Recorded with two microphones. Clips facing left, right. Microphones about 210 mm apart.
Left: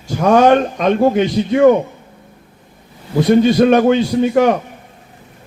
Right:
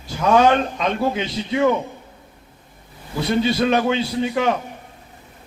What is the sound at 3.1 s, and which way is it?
A man's voice, 50° left (ahead or behind).